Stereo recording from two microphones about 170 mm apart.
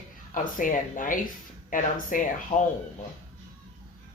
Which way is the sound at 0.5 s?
50° left (ahead or behind).